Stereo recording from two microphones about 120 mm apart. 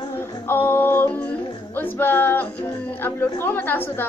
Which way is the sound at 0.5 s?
15° left (ahead or behind).